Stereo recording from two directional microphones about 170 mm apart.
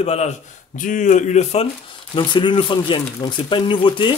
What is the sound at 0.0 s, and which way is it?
Speech, 40° left (ahead or behind).